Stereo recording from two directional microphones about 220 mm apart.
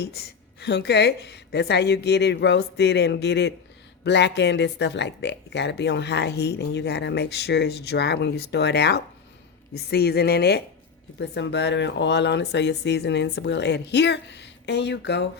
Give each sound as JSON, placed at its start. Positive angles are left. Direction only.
{"t": 0.0, "sound": "speech", "side_deg": 45}